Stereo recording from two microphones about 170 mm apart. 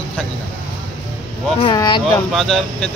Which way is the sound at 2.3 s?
5° left (ahead or behind).